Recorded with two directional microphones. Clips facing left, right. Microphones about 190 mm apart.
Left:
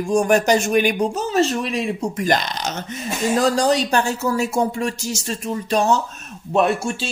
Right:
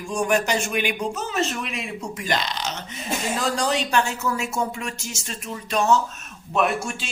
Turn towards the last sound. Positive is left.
turn(degrees=30)  # may be behind; listen again after turning